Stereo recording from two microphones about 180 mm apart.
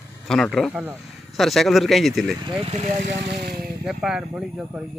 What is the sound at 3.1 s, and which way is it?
Speech, 60° right (ahead or behind).